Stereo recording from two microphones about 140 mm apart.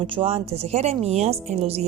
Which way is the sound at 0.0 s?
40° right (ahead or behind).